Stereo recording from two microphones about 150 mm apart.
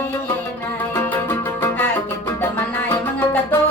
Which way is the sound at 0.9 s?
15° left (ahead or behind).